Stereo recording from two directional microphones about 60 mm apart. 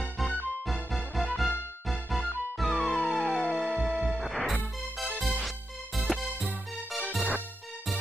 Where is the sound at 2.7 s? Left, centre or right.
Right.